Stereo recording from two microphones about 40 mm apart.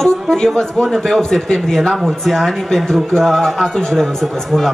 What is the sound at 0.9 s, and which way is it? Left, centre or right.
A man's voice, centre.